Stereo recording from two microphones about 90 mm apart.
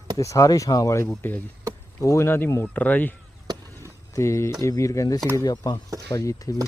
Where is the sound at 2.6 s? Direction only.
15° left (ahead or behind).